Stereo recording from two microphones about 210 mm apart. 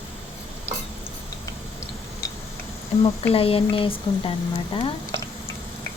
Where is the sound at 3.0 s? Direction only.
25° left (ahead or behind).